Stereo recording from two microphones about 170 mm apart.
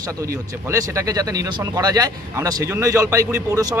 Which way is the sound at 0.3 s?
20° right (ahead or behind).